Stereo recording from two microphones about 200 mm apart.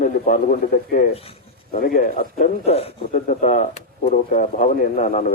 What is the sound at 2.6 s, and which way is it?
Speech, 30° left (ahead or behind).